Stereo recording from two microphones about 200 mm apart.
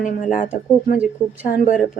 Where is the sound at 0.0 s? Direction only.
40° left (ahead or behind).